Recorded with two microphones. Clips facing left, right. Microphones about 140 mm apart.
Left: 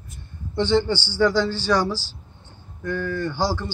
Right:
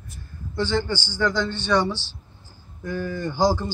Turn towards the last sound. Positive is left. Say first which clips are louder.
# right 3 dB
turn(degrees=-15)  # may be behind; listen again after turning